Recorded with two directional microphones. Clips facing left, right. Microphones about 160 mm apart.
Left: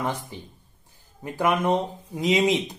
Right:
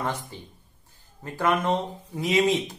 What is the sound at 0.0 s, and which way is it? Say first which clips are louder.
Speech: left 1 dB; 15° left (ahead or behind).